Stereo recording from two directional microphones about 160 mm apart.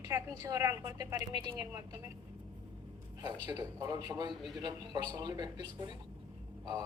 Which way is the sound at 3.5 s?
25° right (ahead or behind).